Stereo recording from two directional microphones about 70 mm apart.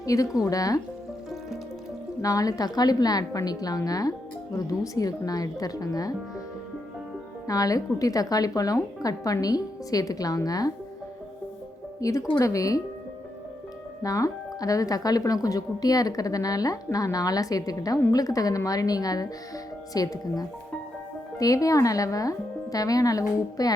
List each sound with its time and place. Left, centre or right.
0.0 s speech: left
2.2 s speech: left
7.4 s speech: left
11.9 s speech: left
14.0 s speech: left